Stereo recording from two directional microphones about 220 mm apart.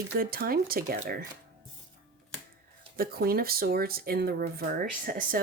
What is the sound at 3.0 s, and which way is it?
Speech, 45° right (ahead or behind).